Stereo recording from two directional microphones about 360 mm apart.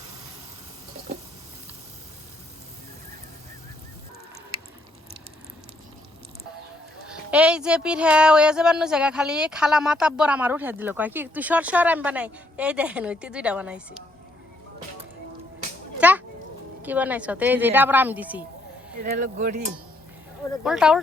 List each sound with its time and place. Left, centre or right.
7.1 s speech: centre
16.0 s a sound: centre
16.8 s speech: centre
19.0 s speech: right
20.7 s speech: centre